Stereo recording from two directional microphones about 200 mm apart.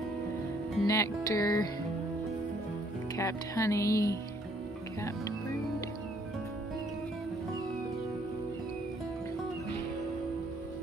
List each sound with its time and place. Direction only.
0.8 s speech: 15° left (ahead or behind)
3.2 s speech: 15° left (ahead or behind)